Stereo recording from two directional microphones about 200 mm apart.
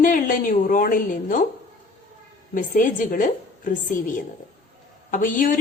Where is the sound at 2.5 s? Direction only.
40° left (ahead or behind).